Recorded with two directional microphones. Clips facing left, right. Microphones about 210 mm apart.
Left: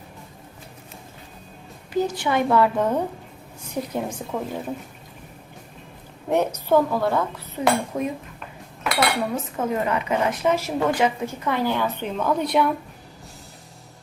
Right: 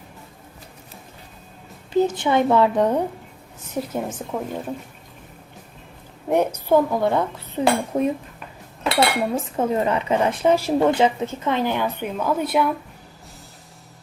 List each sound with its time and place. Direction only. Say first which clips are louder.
1.9 s speech: right 4 dB; 25° right (ahead or behind)
3.9 s speech: left 1 dB; 5° right (ahead or behind)
6.3 s speech: right 1 dB; 10° right (ahead or behind)